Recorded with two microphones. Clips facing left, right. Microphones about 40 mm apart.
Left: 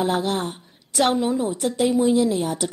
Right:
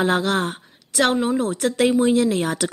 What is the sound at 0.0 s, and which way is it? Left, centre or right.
Speech, right.